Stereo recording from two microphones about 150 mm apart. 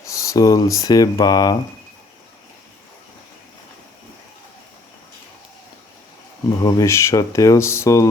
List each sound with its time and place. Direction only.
0.0 s speech: 20° left (ahead or behind)
6.6 s speech: 25° left (ahead or behind)